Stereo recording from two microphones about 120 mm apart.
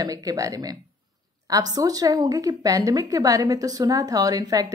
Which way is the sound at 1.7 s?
30° right (ahead or behind).